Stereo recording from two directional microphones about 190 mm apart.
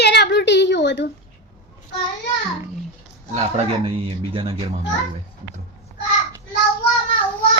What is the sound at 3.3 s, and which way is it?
Speech, 35° right (ahead or behind).